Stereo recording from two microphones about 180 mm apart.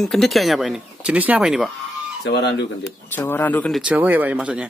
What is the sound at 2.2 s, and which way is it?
Speech, 70° left (ahead or behind).